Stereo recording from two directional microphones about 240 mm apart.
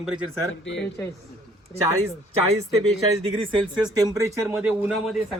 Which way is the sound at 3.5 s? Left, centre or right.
Centre.